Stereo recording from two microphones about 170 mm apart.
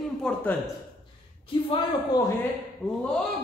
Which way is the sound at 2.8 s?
Centre (ahead or behind).